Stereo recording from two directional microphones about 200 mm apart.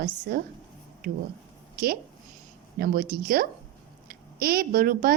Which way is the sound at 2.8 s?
45° right (ahead or behind).